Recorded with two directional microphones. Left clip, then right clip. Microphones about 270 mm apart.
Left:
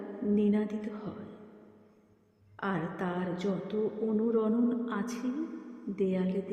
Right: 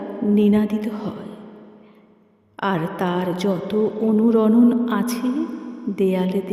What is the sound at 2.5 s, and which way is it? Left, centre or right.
A woman's voice, right.